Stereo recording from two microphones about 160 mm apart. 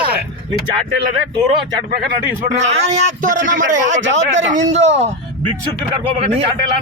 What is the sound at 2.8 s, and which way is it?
A man's voice, 50° right (ahead or behind).